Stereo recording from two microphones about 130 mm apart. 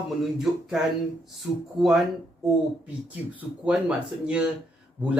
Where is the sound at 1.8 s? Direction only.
Centre (ahead or behind).